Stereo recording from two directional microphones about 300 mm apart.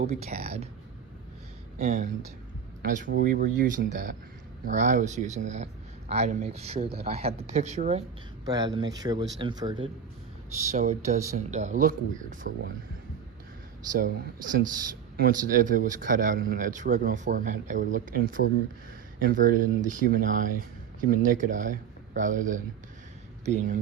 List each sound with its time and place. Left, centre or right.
0.0 s speech: right
1.8 s speech: right
14.0 s speech: right